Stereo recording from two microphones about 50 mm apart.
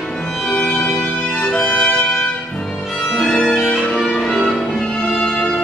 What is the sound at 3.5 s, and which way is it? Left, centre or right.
Music, centre.